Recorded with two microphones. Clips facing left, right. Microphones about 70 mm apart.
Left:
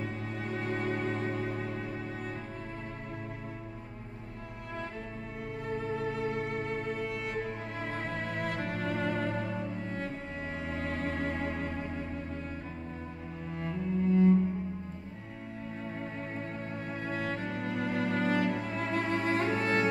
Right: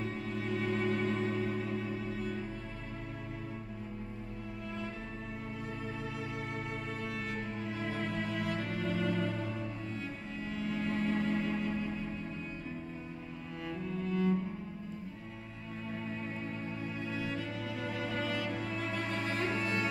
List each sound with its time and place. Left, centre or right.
0.6 s music: left
5.9 s music: left
13.6 s cello: left
17.1 s music: left